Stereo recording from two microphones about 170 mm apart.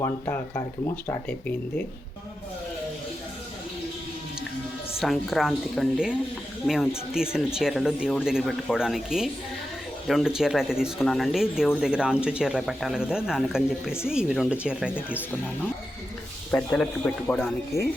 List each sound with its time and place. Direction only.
0.0 s speech: 15° left (ahead or behind)
4.9 s speech: centre (ahead or behind)
16.5 s speech: 5° left (ahead or behind)
17.7 s speech: 15° left (ahead or behind)